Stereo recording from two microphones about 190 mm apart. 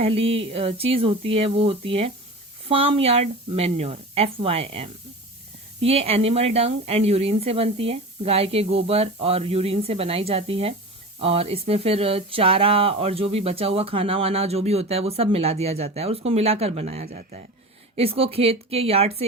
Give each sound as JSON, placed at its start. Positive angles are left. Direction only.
{"t": 0.0, "sound": "speech", "side_deg": -30}
{"t": 17.1, "sound": "speech", "side_deg": -50}
{"t": 17.9, "sound": "speech", "side_deg": -30}